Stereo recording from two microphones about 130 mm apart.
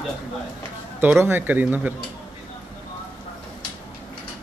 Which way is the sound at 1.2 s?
15° right (ahead or behind).